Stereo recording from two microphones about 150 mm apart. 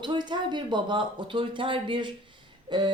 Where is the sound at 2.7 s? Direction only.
30° right (ahead or behind).